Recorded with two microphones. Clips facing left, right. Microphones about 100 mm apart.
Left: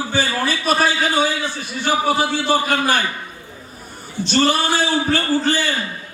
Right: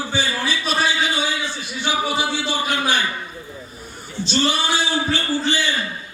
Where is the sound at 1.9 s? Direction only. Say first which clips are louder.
Left 4 dB; 45° left (ahead or behind).